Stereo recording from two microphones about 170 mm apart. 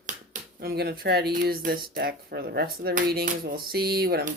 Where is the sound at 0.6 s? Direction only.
65° right (ahead or behind).